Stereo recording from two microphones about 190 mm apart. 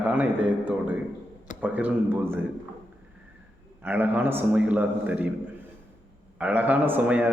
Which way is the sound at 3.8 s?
10° right (ahead or behind).